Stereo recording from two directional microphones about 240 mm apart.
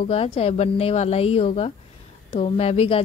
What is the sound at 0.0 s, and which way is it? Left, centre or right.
Speech, left.